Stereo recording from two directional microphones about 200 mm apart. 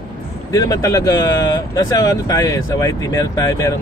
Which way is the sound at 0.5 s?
15° left (ahead or behind).